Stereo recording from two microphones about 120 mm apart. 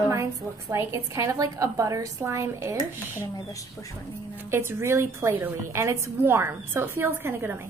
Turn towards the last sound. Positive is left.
turn(degrees=-20)  # may be behind; listen again after turning